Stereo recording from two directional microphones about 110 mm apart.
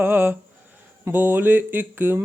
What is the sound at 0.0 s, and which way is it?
Speech, 20° right (ahead or behind).